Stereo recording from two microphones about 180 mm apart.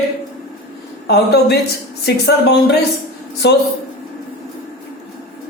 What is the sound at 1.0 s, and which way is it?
Speech, 65° left (ahead or behind).